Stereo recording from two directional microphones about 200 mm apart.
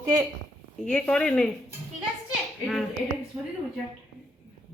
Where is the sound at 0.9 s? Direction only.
5° left (ahead or behind).